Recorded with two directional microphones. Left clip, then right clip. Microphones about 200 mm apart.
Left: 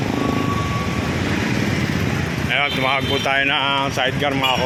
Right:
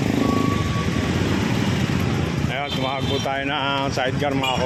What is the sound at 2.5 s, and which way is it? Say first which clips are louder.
Speech: left 9 dB; 5° right (ahead or behind).